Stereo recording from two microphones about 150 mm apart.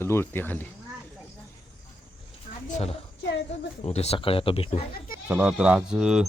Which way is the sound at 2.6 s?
45° left (ahead or behind).